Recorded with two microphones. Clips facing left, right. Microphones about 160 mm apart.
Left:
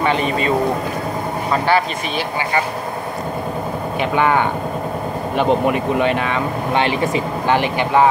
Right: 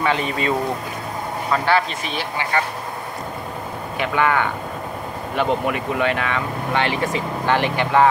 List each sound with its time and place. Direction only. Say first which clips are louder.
0.0 s a man's voice: left 3 dB; centre (ahead or behind)
1.5 s speech: left 2 dB; 5° left (ahead or behind)
4.0 s speech: left 3 dB; 20° left (ahead or behind)